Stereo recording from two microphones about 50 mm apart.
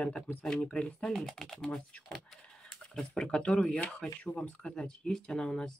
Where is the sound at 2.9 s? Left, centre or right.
Centre.